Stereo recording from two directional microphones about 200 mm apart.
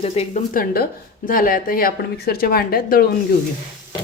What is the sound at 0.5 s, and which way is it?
A woman's voice, 50° left (ahead or behind).